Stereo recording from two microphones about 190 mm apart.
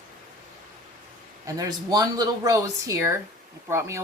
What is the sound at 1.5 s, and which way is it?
A woman's voice, 20° right (ahead or behind).